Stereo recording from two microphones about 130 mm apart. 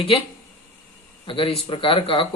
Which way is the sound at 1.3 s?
45° left (ahead or behind).